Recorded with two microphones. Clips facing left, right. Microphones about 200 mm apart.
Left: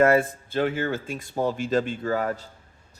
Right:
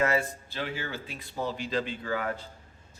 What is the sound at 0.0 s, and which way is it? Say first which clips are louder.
A man's voice: left 8 dB; 55° left (ahead or behind).